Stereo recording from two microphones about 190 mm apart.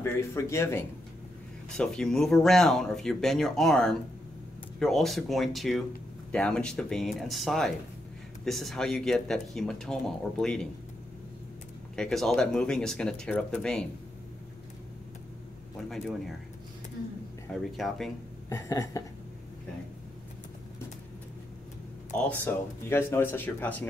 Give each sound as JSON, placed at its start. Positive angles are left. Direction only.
{"t": 0.0, "sound": "speech", "side_deg": 15}
{"t": 1.8, "sound": "speech", "side_deg": 5}
{"t": 11.9, "sound": "speech", "side_deg": 5}
{"t": 15.9, "sound": "speech", "side_deg": 0}
{"t": 17.7, "sound": "speech", "side_deg": 0}
{"t": 18.5, "sound": "speech", "side_deg": 15}
{"t": 22.1, "sound": "speech", "side_deg": 10}